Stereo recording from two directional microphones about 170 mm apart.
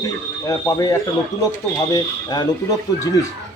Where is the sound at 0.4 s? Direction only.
20° left (ahead or behind).